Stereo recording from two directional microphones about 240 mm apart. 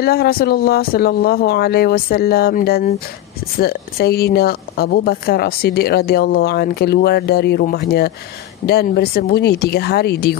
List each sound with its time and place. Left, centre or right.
0.0 s a woman's voice: left